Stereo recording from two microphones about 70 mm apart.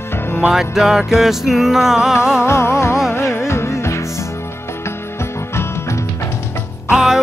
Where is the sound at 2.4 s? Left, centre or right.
Left.